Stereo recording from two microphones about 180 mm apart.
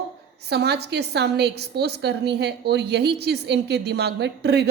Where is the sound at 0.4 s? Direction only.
65° right (ahead or behind).